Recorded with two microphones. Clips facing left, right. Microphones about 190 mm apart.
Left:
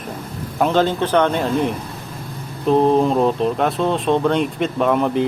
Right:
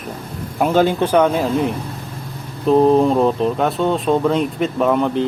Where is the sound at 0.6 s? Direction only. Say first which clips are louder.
Right 2 dB; 10° right (ahead or behind).